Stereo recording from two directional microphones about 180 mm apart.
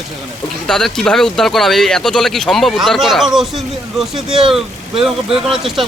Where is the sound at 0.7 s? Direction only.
Centre (ahead or behind).